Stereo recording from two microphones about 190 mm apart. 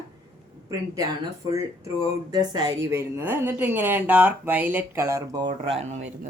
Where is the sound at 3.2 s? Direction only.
10° right (ahead or behind); by 6.1 s 35° right (ahead or behind).